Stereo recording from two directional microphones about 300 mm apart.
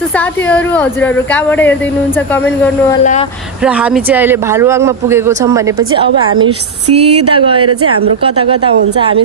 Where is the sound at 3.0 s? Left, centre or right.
Left.